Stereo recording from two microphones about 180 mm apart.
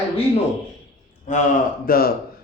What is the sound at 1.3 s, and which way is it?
Speech, 45° left (ahead or behind).